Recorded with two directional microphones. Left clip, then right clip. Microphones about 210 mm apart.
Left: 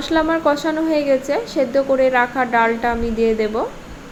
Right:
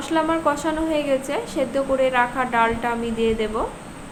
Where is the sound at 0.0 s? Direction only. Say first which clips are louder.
Left 4 dB; 25° left (ahead or behind).